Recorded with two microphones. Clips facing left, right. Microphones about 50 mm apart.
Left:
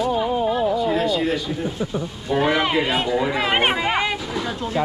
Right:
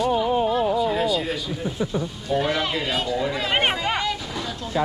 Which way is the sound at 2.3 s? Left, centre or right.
Left.